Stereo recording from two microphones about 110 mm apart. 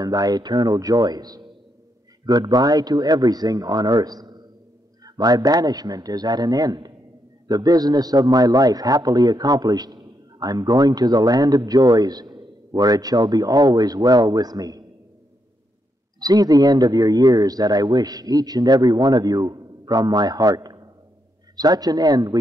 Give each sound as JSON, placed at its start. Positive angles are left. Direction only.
{"t": 0.0, "sound": "speech", "side_deg": -35}
{"t": 16.2, "sound": "speech", "side_deg": -35}